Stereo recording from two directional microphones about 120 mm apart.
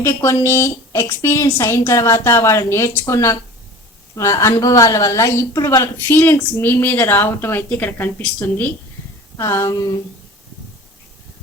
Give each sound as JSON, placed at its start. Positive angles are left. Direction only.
{"t": 0.0, "sound": "a woman's voice", "side_deg": 25}